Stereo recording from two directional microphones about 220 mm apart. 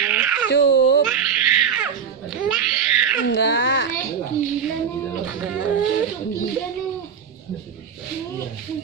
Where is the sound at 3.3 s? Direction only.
50° left (ahead or behind).